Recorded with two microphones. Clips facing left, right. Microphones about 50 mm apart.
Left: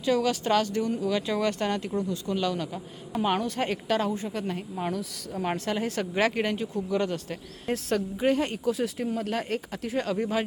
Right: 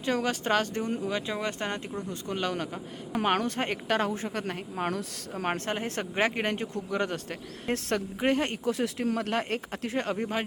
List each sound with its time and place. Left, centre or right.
0.0 s speech: right
5.8 s speech: right